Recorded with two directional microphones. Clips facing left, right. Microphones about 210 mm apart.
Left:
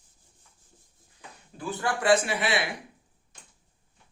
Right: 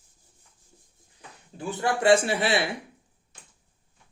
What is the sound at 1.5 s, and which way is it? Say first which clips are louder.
Speech: right 3 dB; 25° right (ahead or behind).